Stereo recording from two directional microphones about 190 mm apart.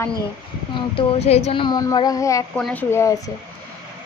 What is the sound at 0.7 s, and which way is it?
Speech, 25° left (ahead or behind).